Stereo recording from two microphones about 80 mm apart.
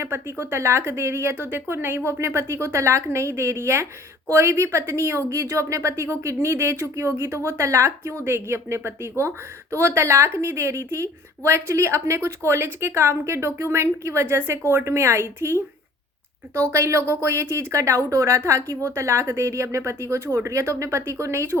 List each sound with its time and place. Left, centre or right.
0.0 s a woman's voice: right
16.7 s a woman's voice: right